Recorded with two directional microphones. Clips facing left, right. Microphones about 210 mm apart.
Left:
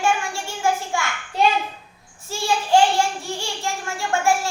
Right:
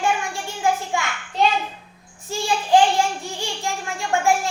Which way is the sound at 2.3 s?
15° right (ahead or behind).